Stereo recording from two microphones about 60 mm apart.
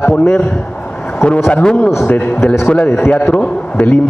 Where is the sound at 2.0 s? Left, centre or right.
Left.